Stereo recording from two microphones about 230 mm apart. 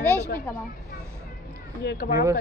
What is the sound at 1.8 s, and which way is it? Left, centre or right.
Speech, left.